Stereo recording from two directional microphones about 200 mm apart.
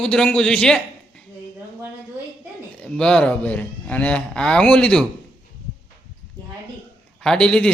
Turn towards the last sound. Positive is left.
turn(degrees=5)  # may be behind; listen again after turning